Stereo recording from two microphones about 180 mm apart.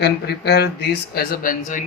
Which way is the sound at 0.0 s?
65° left (ahead or behind).